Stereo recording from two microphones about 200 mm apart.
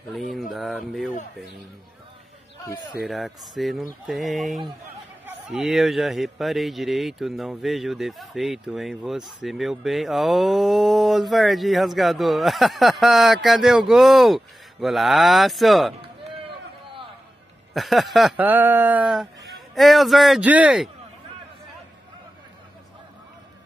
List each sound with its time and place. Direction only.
0.3 s a sound: centre (ahead or behind)
3.0 s speech: centre (ahead or behind)
16.0 s chop: 25° right (ahead or behind)
17.7 s speech: centre (ahead or behind)